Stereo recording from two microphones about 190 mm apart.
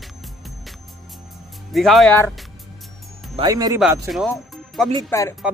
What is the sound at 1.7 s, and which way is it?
Speech, centre (ahead or behind).